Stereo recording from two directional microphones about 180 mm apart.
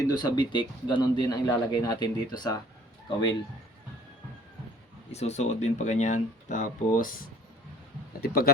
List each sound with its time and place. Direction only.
0.0 s speech: 20° left (ahead or behind)
5.1 s speech: 40° left (ahead or behind); by 8.4 s 55° left (ahead or behind)